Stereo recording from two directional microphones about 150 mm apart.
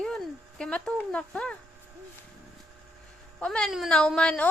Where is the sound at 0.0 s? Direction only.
5° left (ahead or behind).